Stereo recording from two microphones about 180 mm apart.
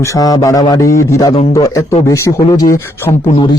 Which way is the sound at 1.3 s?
35° left (ahead or behind).